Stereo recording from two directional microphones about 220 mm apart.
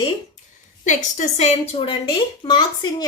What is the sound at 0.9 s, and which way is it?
Speech, 35° left (ahead or behind).